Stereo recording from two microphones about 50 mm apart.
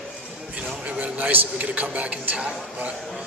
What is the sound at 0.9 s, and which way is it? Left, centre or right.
A man's voice, right.